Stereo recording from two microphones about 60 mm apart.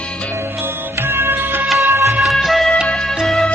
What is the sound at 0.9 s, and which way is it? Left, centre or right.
Music, right.